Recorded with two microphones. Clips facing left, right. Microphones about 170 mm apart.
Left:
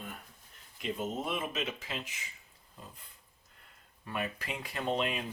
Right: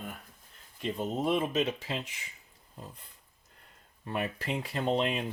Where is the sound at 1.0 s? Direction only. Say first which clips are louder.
Right 7 dB; 35° right (ahead or behind).